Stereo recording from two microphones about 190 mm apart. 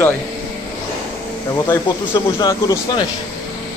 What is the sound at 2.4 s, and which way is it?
Speech, 20° left (ahead or behind).